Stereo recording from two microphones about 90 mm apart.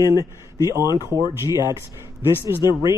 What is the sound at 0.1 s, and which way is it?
Speech, 40° right (ahead or behind).